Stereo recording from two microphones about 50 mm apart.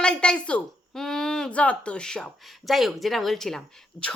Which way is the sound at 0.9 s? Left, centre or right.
Centre.